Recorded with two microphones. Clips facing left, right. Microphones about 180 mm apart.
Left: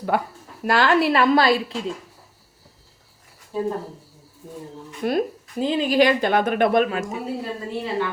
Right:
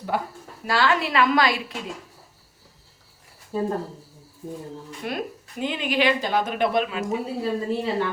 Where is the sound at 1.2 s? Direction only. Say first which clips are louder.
Left 4 dB; 35° left (ahead or behind).